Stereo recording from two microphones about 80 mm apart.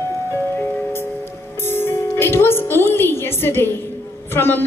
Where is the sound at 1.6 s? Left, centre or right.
Left.